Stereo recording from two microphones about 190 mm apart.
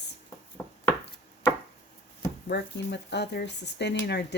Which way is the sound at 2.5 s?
60° left (ahead or behind).